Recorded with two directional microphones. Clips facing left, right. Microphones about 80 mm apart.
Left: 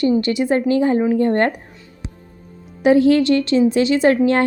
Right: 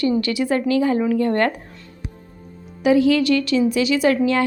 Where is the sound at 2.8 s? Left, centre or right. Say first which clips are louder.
Left 3 dB; left.